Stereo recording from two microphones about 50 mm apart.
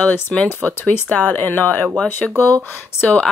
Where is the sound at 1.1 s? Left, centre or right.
Left.